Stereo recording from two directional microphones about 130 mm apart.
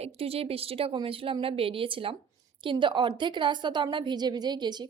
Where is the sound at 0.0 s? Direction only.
50° right (ahead or behind).